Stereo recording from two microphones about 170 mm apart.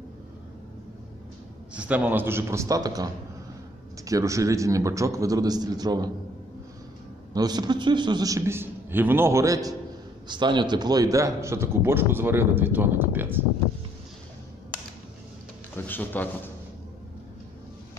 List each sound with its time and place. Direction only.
1.7 s a man's voice: 10° right (ahead or behind)
7.3 s a man's voice: 25° right (ahead or behind)
15.7 s speech: 10° left (ahead or behind)